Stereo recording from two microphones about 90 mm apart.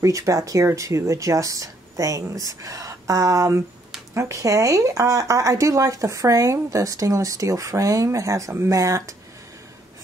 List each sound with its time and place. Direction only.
0.0 s speech: 35° right (ahead or behind)